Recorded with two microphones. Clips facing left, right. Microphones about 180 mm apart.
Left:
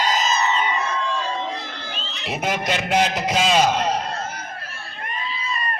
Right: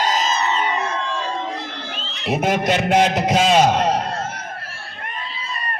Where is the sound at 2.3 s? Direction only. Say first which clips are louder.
Right 5 dB; 55° right (ahead or behind).